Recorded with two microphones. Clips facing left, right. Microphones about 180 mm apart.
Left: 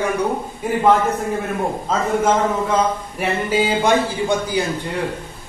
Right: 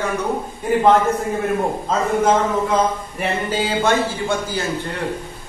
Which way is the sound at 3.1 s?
10° left (ahead or behind).